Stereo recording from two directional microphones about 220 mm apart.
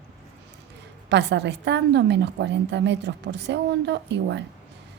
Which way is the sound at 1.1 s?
50° right (ahead or behind).